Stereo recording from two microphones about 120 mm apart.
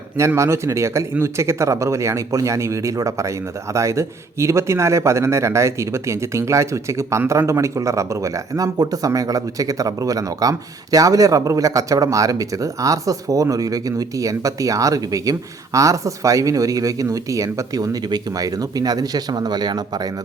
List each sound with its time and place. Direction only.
0.3 s speech: 25° right (ahead or behind)